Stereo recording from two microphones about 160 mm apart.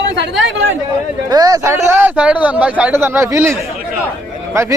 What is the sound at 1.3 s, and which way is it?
Speech, 25° right (ahead or behind).